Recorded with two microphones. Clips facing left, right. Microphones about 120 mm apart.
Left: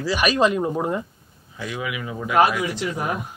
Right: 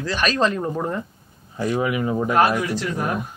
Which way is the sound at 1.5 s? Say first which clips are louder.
Right 7 dB; 40° right (ahead or behind).